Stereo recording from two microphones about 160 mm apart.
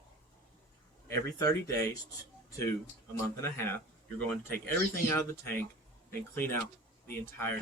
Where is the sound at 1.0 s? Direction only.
20° left (ahead or behind).